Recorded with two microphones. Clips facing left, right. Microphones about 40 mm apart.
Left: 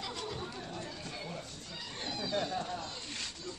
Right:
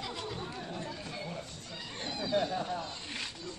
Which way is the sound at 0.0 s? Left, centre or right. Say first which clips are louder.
Right 1 dB; centre.